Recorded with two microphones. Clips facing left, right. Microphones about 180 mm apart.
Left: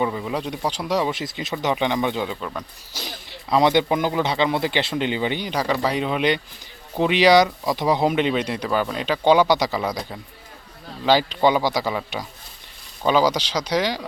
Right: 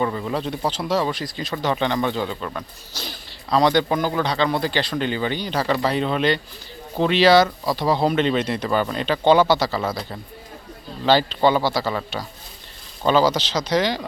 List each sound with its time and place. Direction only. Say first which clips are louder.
0.0 s speech: right 1 dB; 5° left (ahead or behind)
3.5 s speech: even; 20° left (ahead or behind)
11.0 s speech: right 1 dB; 10° left (ahead or behind)